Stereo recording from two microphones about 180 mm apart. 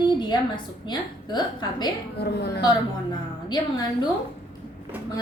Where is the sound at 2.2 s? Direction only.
65° left (ahead or behind).